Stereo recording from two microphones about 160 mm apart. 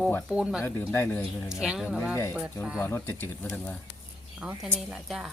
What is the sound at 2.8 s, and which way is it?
Speech, 15° left (ahead or behind).